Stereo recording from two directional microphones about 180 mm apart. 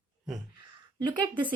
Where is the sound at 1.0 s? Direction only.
25° right (ahead or behind).